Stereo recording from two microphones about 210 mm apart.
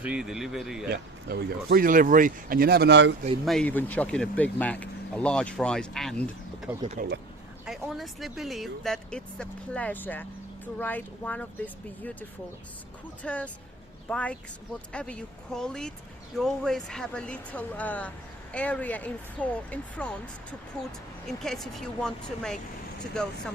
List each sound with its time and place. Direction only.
0.0 s speech: 5° right (ahead or behind)
0.9 s speech: 50° right (ahead or behind)
3.4 s speech: 5° left (ahead or behind)
6.8 s speech: 40° right (ahead or behind)
7.6 s speech: centre (ahead or behind)
13.2 s speech: 5° left (ahead or behind)